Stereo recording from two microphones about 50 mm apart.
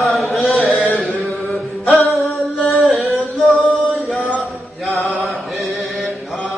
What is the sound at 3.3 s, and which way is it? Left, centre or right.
Music, centre.